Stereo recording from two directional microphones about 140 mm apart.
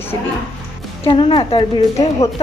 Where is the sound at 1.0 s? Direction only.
40° left (ahead or behind).